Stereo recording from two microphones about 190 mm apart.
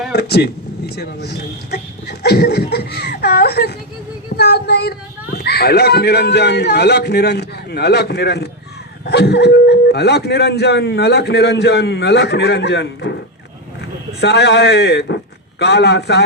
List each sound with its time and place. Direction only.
0.1 s speech: 60° left (ahead or behind)
14.2 s a man's voice: 65° left (ahead or behind)